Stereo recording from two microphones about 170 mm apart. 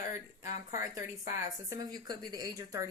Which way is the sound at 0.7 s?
50° left (ahead or behind).